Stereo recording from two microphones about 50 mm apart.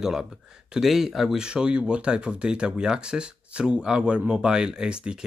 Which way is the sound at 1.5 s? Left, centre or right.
Centre.